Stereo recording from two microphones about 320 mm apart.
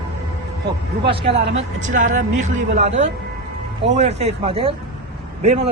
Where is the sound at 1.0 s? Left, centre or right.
Centre.